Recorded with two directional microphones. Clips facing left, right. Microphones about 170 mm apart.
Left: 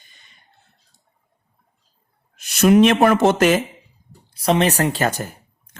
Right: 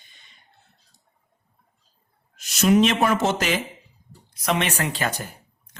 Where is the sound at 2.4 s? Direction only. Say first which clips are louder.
Left 5 dB; 55° left (ahead or behind).